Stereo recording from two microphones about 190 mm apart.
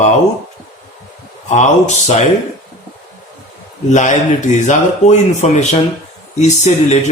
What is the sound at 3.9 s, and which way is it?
A man's voice, 40° left (ahead or behind).